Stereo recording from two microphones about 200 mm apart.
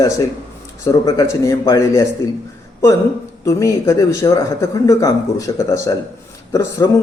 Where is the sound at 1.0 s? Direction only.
15° left (ahead or behind).